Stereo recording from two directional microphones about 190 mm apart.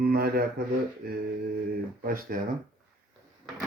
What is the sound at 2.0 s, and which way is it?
Speech, 50° right (ahead or behind).